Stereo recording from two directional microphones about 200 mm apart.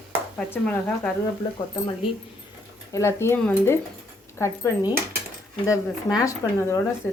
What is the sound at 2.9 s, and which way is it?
Speech, 15° left (ahead or behind).